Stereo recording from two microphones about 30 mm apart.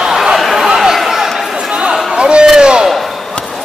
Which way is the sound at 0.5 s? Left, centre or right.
Centre.